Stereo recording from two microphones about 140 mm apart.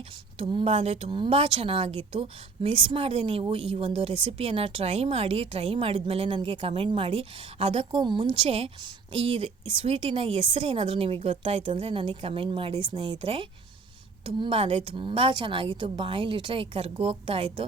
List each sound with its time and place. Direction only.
0.3 s a woman's voice: 40° right (ahead or behind)